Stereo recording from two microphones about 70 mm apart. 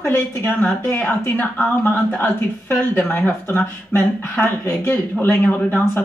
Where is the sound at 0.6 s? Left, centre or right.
Left.